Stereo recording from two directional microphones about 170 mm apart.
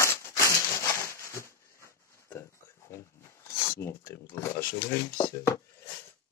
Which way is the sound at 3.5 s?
15° left (ahead or behind).